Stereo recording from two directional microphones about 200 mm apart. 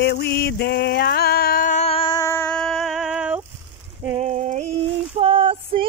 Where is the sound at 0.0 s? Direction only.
55° left (ahead or behind); by 3.4 s 5° right (ahead or behind).